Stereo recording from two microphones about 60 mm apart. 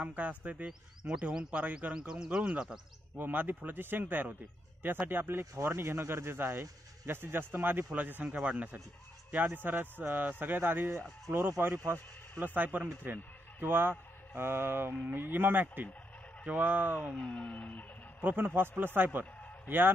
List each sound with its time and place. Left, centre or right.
0.0 s speech: right
1.5 s speech: right
3.2 s a man's voice: right
9.5 s a man's voice: right
10.9 s a man's voice: right
17.1 s a sound: centre
18.2 s a man's voice: right